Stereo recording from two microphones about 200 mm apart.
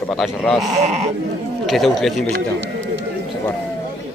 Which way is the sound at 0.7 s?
35° right (ahead or behind).